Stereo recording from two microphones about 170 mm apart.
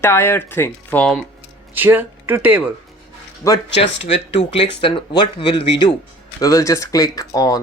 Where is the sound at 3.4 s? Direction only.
20° left (ahead or behind).